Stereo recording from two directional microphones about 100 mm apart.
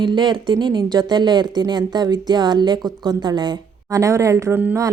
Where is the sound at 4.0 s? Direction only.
30° right (ahead or behind).